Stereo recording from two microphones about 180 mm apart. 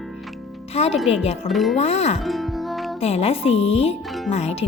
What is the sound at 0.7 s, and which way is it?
Speech, 35° left (ahead or behind).